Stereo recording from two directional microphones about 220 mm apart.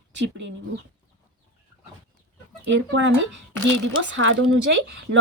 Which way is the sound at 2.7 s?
55° right (ahead or behind).